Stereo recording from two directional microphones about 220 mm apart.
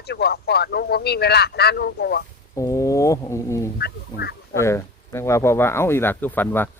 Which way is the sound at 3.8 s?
45° left (ahead or behind).